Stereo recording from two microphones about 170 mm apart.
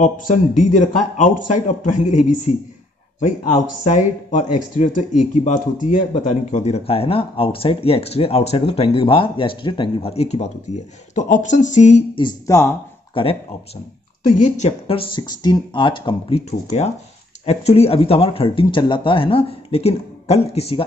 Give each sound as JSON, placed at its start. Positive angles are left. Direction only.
{"t": 0.0, "sound": "a man's voice", "side_deg": 45}
{"t": 12.2, "sound": "speech", "side_deg": 20}
{"t": 13.1, "sound": "speech", "side_deg": 35}
{"t": 14.3, "sound": "speech", "side_deg": 45}